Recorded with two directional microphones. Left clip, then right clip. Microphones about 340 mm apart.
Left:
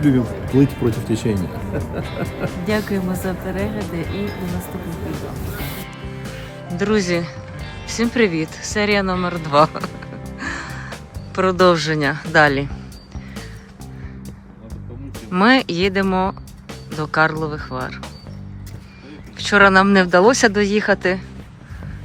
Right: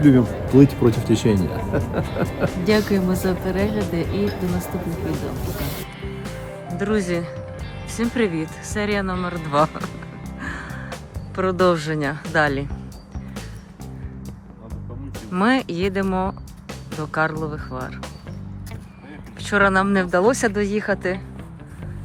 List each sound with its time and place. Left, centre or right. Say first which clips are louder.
0.0 s speech: right 2 dB; centre
6.7 s speech: left 4 dB; centre
10.3 s music: left 4 dB; centre
15.3 s speech: left 5 dB; centre
19.4 s speech: left 6 dB; centre